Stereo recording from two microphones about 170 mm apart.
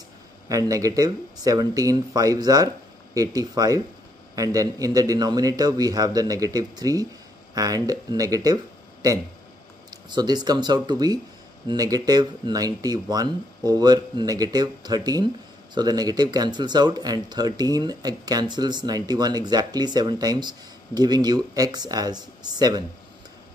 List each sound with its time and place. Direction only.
0.5 s speech: 20° right (ahead or behind)